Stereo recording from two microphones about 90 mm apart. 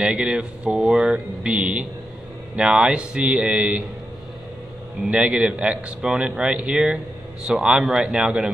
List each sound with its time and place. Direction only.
0.0 s a man's voice: 5° right (ahead or behind)
5.0 s a man's voice: 10° right (ahead or behind)